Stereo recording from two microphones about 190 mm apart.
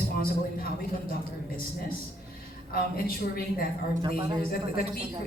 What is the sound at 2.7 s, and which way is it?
Speech, 50° left (ahead or behind).